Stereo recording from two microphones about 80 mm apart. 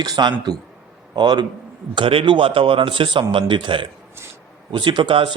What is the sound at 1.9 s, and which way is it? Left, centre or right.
A man's voice, right.